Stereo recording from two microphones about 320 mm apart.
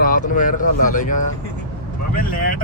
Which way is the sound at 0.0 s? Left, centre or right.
Left.